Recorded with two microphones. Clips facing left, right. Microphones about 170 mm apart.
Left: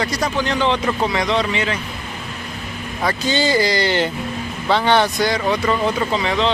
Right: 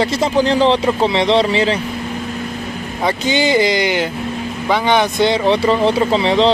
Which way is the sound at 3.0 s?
20° right (ahead or behind).